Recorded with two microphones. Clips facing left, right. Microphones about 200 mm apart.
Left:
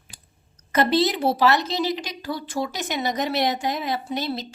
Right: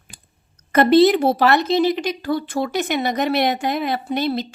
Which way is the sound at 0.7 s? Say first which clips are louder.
Right 8 dB; 55° right (ahead or behind).